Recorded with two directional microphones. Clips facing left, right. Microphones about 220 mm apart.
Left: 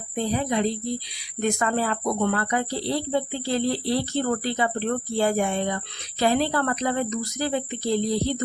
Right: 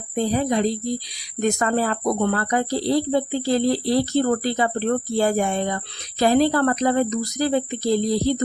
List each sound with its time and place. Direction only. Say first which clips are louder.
0.2 s a woman's voice: right 4 dB; 40° right (ahead or behind)